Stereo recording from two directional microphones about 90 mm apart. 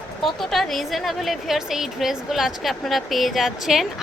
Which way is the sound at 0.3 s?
Centre (ahead or behind).